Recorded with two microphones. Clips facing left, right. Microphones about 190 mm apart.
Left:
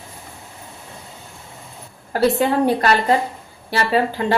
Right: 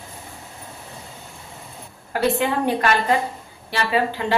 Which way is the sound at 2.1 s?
40° left (ahead or behind).